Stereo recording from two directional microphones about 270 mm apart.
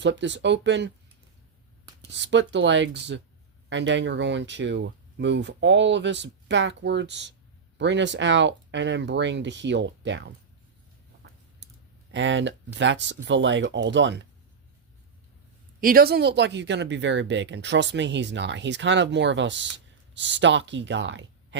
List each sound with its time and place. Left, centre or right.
0.0 s speech: right
2.1 s speech: right
12.1 s speech: right
15.8 s speech: right